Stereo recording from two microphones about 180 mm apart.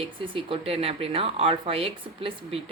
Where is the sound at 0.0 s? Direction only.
30° right (ahead or behind).